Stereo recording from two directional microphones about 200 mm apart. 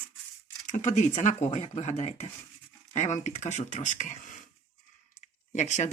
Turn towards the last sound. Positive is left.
turn(degrees=35)  # may be behind; listen again after turning